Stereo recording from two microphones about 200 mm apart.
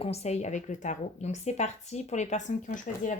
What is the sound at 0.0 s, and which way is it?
A woman's voice, 30° left (ahead or behind).